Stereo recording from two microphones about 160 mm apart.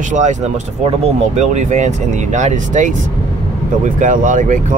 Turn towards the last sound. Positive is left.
turn(degrees=-55)  # may be behind; listen again after turning